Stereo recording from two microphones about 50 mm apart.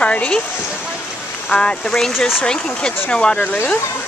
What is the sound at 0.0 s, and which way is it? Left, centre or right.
Speech, left.